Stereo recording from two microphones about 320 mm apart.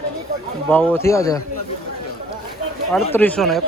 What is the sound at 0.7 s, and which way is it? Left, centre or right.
Speech, centre.